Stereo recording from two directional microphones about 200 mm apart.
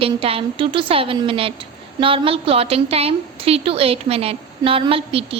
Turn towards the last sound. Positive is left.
turn(degrees=-30)  # may be behind; listen again after turning